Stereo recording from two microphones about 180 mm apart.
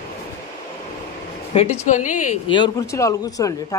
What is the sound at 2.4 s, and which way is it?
A man's voice, 25° left (ahead or behind).